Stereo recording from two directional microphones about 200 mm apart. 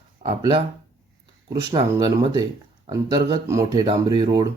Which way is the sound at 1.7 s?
20° right (ahead or behind).